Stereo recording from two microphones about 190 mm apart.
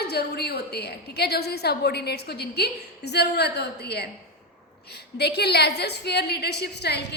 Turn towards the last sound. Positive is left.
turn(degrees=60)  # may be behind; listen again after turning